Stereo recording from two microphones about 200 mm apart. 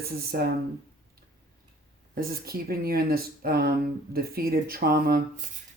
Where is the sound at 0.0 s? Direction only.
50° right (ahead or behind).